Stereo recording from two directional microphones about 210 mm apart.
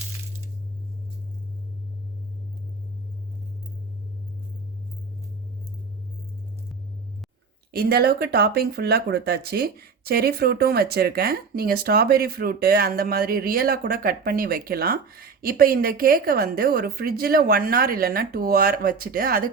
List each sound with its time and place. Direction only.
7.7 s speech: 50° right (ahead or behind)